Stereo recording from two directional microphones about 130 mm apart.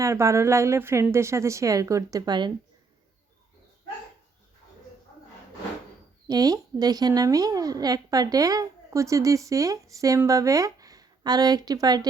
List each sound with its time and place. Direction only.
0.0 s a woman's voice: 20° right (ahead or behind)
6.2 s a woman's voice: 30° right (ahead or behind)